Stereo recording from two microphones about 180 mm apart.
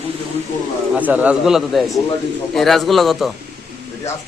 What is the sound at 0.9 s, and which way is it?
Speech, 10° right (ahead or behind).